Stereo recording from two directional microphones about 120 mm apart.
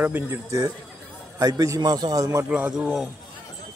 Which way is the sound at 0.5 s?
30° right (ahead or behind).